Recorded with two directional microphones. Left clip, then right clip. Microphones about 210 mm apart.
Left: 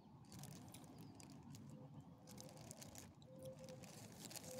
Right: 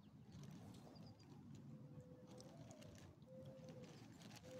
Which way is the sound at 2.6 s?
55° left (ahead or behind).